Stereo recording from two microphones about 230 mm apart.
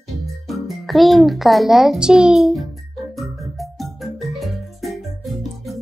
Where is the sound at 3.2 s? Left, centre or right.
Centre.